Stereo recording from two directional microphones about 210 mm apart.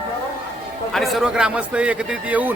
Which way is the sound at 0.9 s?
Centre (ahead or behind).